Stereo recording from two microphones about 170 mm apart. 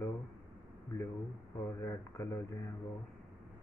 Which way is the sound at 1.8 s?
15° left (ahead or behind).